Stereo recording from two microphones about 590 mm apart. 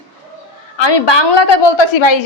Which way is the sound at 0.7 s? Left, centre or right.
Left.